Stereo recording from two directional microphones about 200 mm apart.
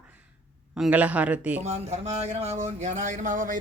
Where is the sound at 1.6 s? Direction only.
35° right (ahead or behind).